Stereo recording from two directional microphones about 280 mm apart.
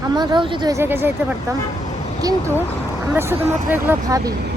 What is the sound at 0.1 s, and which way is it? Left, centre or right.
Speech, centre.